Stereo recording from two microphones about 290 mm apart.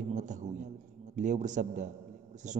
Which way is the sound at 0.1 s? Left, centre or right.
Right.